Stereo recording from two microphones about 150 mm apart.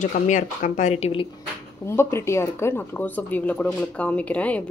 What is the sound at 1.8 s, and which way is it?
Speech, 15° left (ahead or behind).